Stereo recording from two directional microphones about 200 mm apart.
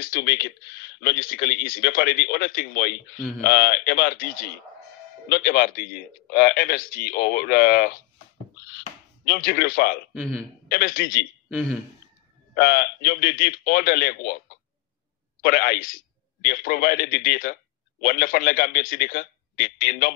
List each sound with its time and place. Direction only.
0.0 s a man's voice: 45° left (ahead or behind)
3.2 s speech: 5° left (ahead or behind)
3.4 s a man's voice: 50° left (ahead or behind)
9.3 s a man's voice: 50° left (ahead or behind)
12.5 s a man's voice: 50° left (ahead or behind)
15.4 s a man's voice: 50° left (ahead or behind)